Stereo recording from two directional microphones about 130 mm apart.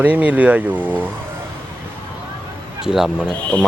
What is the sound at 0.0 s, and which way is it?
Speech, 10° right (ahead or behind).